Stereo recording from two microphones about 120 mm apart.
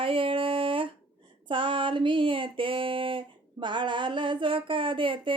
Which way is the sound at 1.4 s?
45° right (ahead or behind).